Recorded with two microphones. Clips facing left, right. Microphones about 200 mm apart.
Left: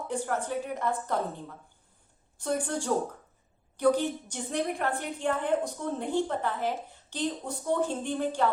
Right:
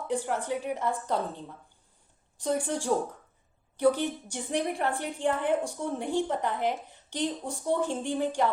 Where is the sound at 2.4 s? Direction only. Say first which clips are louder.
Right 1 dB; 15° right (ahead or behind).